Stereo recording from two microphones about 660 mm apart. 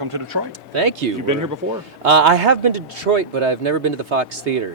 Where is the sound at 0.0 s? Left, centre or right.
Right.